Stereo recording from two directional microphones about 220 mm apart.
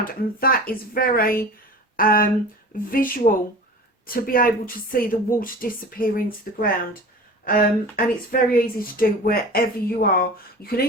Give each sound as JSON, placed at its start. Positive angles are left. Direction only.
{"t": 0.0, "sound": "speech", "side_deg": 40}